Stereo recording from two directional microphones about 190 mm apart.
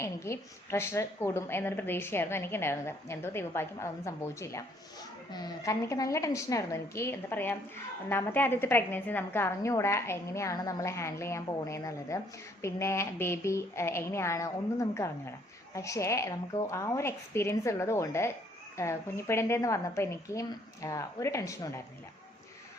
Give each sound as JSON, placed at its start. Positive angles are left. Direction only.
{"t": 0.0, "sound": "a woman's voice", "side_deg": 15}